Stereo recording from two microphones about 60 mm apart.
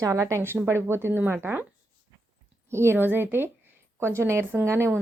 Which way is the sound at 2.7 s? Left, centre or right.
Right.